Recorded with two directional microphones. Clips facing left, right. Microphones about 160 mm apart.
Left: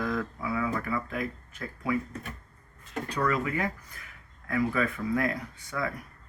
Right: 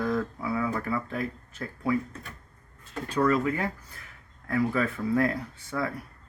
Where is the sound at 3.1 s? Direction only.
30° right (ahead or behind).